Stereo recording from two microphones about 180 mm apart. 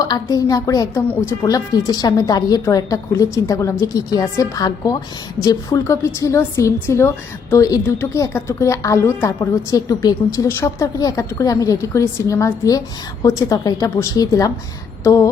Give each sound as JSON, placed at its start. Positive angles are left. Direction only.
{"t": 0.0, "sound": "a woman's voice", "side_deg": 20}